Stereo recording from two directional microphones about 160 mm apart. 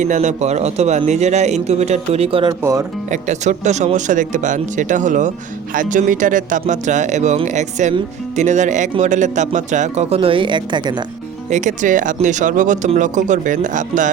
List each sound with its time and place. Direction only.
0.0 s speech: 50° right (ahead or behind)
2.5 s speech: 20° right (ahead or behind)
3.1 s speech: 50° right (ahead or behind); by 11.0 s 30° right (ahead or behind)
11.4 s speech: 50° right (ahead or behind)